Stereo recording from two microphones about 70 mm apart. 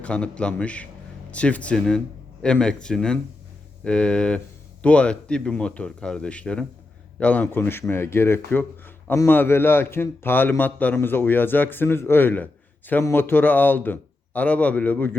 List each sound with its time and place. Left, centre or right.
0.0 s a man's voice: centre
7.4 s a man's voice: left